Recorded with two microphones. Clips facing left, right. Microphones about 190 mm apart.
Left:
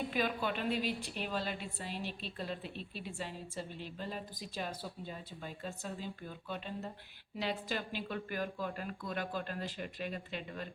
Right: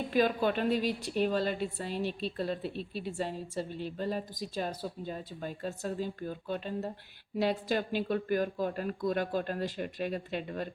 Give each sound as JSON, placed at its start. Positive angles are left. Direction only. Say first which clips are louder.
{"t": 0.1, "sound": "a woman's voice", "louder": "right 7 dB", "side_deg": -40}